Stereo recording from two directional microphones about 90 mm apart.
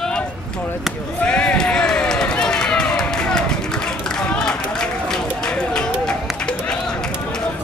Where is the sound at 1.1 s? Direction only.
10° left (ahead or behind).